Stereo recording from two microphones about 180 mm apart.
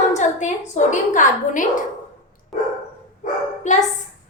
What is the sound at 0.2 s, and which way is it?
A woman's voice, 40° left (ahead or behind).